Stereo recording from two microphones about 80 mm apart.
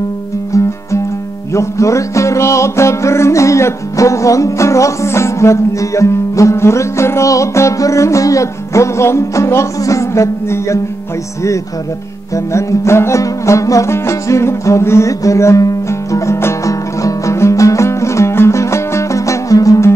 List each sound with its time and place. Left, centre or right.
0.5 s music: left
12.5 s music: left